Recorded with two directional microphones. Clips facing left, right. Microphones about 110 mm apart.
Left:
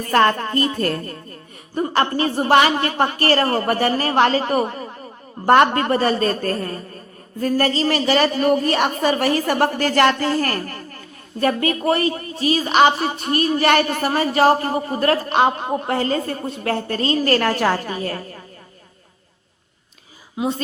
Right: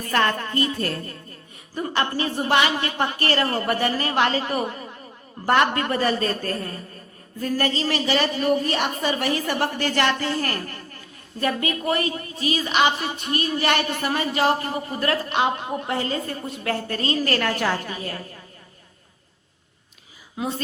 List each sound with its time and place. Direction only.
0.1 s a woman's voice: 40° left (ahead or behind)